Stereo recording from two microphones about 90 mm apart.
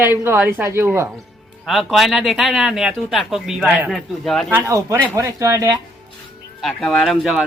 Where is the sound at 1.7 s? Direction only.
Centre (ahead or behind).